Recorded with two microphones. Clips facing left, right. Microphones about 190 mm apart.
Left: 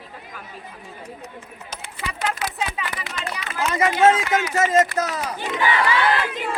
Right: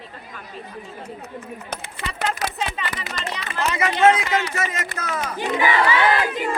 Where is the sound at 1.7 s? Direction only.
55° right (ahead or behind).